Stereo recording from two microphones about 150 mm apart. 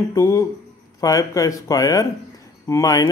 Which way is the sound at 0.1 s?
25° left (ahead or behind).